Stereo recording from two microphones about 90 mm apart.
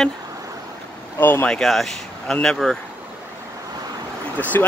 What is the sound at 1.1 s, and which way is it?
Speech, 25° left (ahead or behind).